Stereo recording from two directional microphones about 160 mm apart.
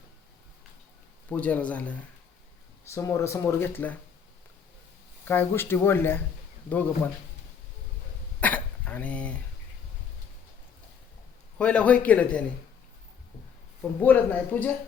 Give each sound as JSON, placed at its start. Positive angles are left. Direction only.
{"t": 1.3, "sound": "speech", "side_deg": 10}
{"t": 5.2, "sound": "speech", "side_deg": 10}
{"t": 8.4, "sound": "throat clearing", "side_deg": 10}
{"t": 11.5, "sound": "speech", "side_deg": 5}
{"t": 14.0, "sound": "speech", "side_deg": 10}